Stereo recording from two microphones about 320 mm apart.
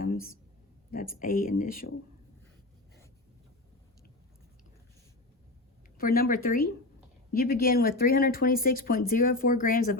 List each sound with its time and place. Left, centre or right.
0.9 s speech: left
6.0 s speech: left